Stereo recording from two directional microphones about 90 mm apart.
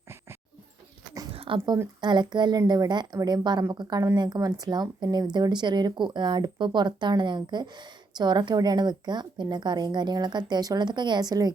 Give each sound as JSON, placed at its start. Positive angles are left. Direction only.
{"t": 1.3, "sound": "dog", "side_deg": -90}
{"t": 2.0, "sound": "speech", "side_deg": -55}
{"t": 2.6, "sound": "a woman's voice", "side_deg": -45}